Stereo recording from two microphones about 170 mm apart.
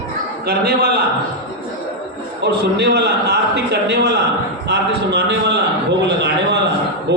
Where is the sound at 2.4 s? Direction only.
90° right.